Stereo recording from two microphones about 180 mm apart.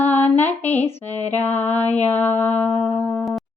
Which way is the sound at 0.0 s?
10° left (ahead or behind).